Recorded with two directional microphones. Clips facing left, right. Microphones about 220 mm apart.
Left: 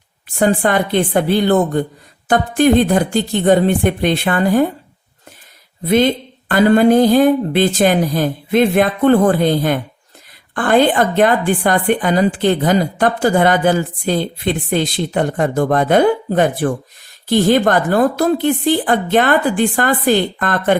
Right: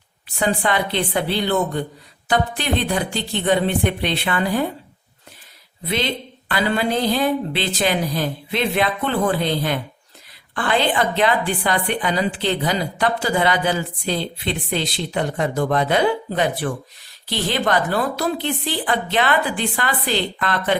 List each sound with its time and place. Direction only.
0.3 s a woman's voice: 50° left (ahead or behind)
5.8 s a woman's voice: 50° left (ahead or behind)